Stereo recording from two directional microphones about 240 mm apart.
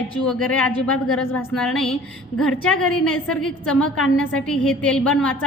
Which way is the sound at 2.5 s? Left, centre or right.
Left.